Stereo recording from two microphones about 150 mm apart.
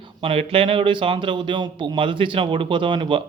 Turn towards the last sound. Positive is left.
turn(degrees=-35)  # may be behind; listen again after turning